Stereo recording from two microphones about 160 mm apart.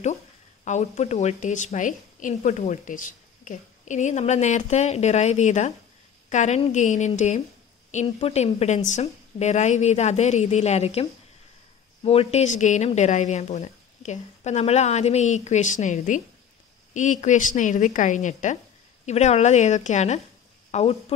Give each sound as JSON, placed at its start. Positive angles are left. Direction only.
{"t": 0.7, "sound": "a woman's voice", "side_deg": 45}